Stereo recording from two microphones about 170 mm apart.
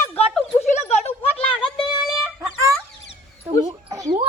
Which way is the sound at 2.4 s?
20° right (ahead or behind).